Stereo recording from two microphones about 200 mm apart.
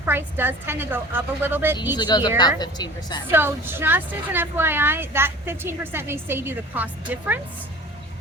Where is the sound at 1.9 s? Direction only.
20° left (ahead or behind).